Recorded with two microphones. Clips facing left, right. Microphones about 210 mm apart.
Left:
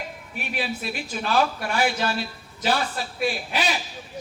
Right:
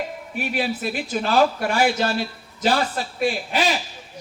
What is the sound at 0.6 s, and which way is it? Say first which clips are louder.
A man's voice: right 3 dB; 45° right (ahead or behind).